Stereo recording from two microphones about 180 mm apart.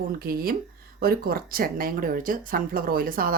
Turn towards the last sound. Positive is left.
turn(degrees=-55)  # may be behind; listen again after turning